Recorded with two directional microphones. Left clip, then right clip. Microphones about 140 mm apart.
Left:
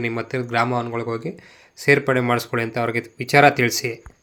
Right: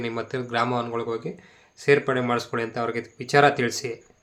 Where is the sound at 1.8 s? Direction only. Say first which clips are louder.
Left 3 dB; 25° left (ahead or behind).